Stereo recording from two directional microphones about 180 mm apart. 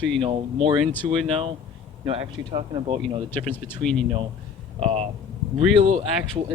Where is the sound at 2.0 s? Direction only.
30° right (ahead or behind).